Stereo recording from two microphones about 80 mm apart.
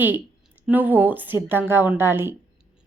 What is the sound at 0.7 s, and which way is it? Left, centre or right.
Speech, right.